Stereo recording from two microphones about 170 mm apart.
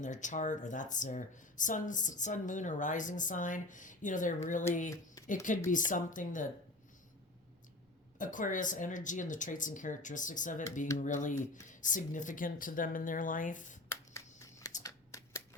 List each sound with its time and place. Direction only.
0.0 s speech: 45° left (ahead or behind)
8.2 s speech: 50° left (ahead or behind)
13.9 s a sound: 15° left (ahead or behind)
14.8 s shuffling cards: 20° left (ahead or behind)